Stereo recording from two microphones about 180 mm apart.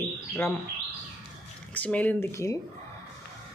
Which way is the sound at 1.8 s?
10° left (ahead or behind).